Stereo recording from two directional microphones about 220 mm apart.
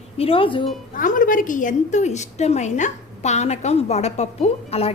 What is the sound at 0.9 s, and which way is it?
A woman's voice, 35° left (ahead or behind).